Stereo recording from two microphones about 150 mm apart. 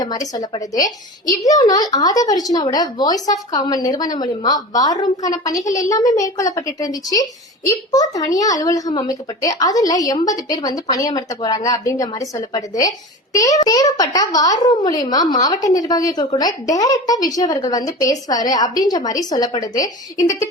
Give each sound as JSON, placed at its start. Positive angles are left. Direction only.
{"t": 0.0, "sound": "a woman's voice", "side_deg": 25}